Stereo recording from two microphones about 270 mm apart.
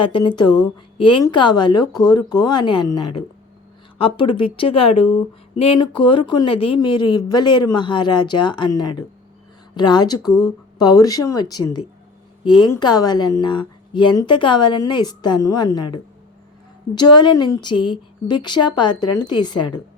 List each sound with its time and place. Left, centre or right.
0.0 s speech: centre
3.9 s speech: centre
16.9 s speech: centre